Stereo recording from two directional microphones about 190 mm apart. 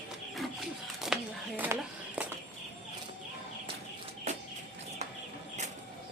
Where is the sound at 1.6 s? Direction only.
10° right (ahead or behind).